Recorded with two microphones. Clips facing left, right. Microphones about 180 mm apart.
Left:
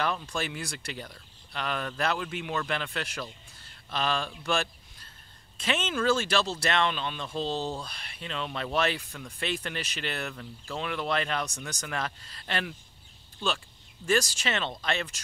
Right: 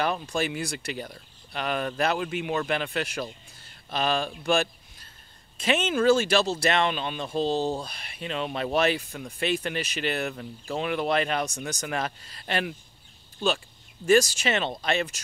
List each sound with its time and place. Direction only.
0.0 s speech: 10° right (ahead or behind)
14.0 s speech: 15° right (ahead or behind)